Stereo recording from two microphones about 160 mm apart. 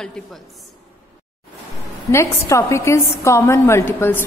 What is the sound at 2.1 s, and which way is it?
A woman's voice, 20° left (ahead or behind).